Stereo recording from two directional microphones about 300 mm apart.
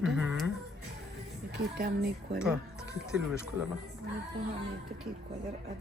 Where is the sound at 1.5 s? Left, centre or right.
Right.